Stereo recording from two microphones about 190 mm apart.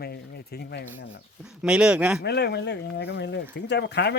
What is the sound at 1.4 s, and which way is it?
Speech, 5° right (ahead or behind).